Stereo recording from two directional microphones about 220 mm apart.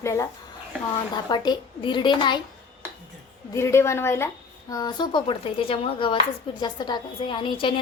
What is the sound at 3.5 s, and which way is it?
Speech, 10° left (ahead or behind).